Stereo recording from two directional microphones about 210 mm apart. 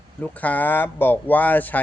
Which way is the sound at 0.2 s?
5° left (ahead or behind).